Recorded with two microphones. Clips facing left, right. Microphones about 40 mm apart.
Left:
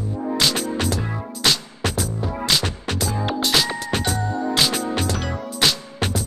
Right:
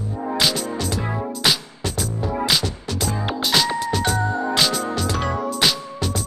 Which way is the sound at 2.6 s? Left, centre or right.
Left.